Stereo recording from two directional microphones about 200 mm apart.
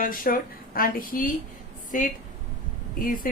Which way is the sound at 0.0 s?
45° left (ahead or behind).